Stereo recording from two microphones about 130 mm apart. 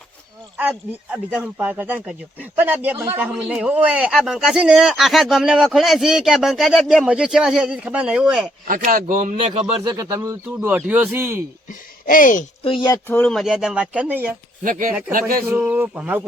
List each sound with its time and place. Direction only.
0.5 s speech: 10° right (ahead or behind)
8.6 s speech: 90° right
9.5 s speech: 30° right (ahead or behind)
10.2 s speech: 15° right (ahead or behind)
11.7 s speech: 90° left
12.6 s speech: 35° left (ahead or behind)
13.1 s speech: 15° left (ahead or behind)
13.3 s speech: centre (ahead or behind)
14.6 s speech: 90° right
15.4 s speech: 15° right (ahead or behind)